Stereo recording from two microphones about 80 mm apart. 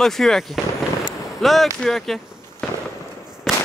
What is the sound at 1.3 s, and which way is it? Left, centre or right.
Speech, centre.